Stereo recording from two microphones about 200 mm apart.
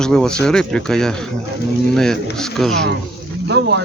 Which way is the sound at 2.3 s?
Centre (ahead or behind).